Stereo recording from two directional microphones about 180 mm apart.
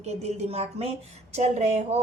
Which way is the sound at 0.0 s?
35° right (ahead or behind).